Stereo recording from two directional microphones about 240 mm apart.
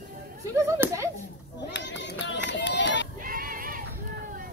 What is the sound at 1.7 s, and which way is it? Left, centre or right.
Run, left.